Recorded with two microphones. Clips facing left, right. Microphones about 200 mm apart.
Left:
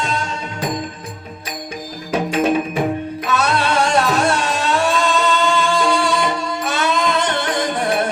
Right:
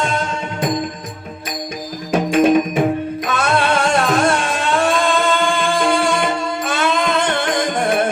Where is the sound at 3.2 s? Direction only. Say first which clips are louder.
Even; 50° right (ahead or behind).